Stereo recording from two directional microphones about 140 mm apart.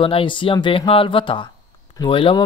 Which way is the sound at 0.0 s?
40° left (ahead or behind).